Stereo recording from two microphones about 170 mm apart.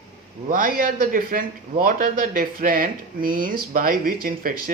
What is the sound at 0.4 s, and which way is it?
A man's voice, 55° right (ahead or behind).